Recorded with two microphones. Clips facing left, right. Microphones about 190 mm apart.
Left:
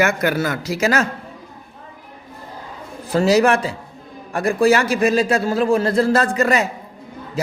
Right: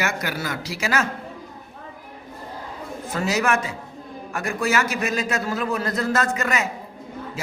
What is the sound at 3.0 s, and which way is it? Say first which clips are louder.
A man's voice: left 8 dB; 35° left (ahead or behind).